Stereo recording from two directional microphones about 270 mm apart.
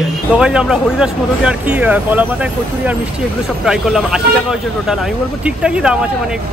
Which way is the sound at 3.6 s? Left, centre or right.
Centre.